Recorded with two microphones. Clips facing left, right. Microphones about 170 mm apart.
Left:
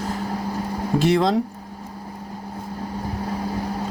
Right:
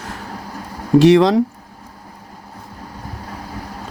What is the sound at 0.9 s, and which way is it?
Speech, 90° right.